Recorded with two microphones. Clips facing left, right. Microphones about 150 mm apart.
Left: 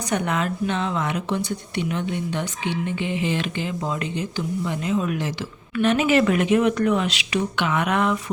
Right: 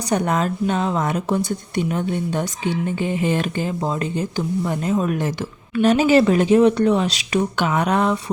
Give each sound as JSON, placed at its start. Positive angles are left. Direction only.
{"t": 0.1, "sound": "speech", "side_deg": -40}
{"t": 5.7, "sound": "speech", "side_deg": -35}